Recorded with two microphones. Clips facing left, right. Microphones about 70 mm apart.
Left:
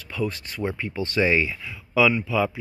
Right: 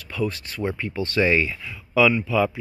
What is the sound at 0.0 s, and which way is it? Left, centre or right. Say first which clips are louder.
Speech: right 1 dB; left.